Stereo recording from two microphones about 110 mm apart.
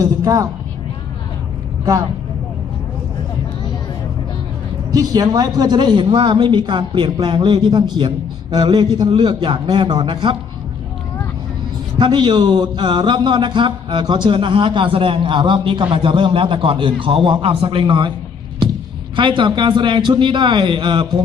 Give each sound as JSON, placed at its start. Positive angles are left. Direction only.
{"t": 0.0, "sound": "a man's voice", "side_deg": -30}
{"t": 4.9, "sound": "a man's voice", "side_deg": -35}
{"t": 11.9, "sound": "a man's voice", "side_deg": -45}
{"t": 18.6, "sound": "a sound", "side_deg": -50}
{"t": 19.1, "sound": "a man's voice", "side_deg": -45}